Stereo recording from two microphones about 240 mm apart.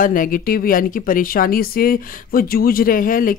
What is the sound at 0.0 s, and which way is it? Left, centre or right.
Speech, left.